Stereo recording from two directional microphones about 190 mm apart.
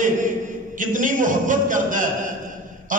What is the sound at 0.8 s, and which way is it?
A man's voice, 45° right (ahead or behind).